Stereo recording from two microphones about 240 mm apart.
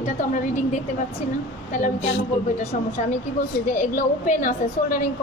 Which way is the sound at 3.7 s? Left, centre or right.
Left.